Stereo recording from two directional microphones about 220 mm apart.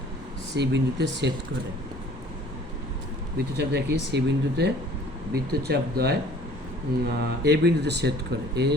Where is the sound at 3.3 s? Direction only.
50° right (ahead or behind).